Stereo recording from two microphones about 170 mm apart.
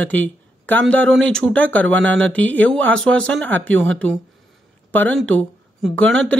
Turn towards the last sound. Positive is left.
turn(degrees=5)  # may be behind; listen again after turning